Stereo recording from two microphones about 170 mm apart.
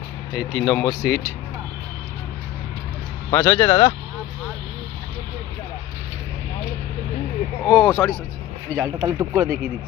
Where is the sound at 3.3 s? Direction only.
15° left (ahead or behind).